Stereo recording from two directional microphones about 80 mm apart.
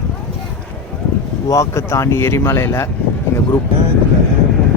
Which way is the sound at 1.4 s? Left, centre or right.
Left.